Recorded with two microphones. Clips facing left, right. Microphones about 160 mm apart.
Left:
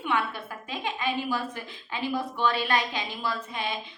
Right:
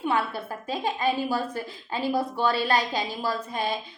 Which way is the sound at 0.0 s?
35° right (ahead or behind).